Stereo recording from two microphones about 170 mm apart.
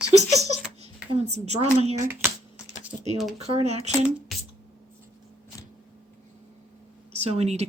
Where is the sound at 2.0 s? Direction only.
15° right (ahead or behind).